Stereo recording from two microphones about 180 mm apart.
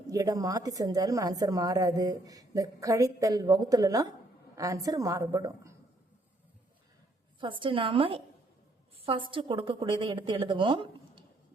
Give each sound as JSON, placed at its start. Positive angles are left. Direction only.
{"t": 0.1, "sound": "a woman's voice", "side_deg": -20}
{"t": 7.3, "sound": "a woman's voice", "side_deg": -25}